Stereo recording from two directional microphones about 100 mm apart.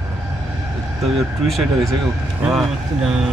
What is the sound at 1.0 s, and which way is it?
Speech, centre (ahead or behind).